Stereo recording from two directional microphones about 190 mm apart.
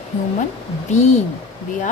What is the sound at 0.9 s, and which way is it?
Speech, 35° left (ahead or behind).